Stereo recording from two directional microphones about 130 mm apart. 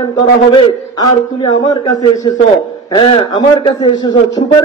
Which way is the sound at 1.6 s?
30° left (ahead or behind).